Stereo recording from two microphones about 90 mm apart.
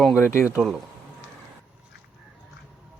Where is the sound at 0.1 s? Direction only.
25° left (ahead or behind).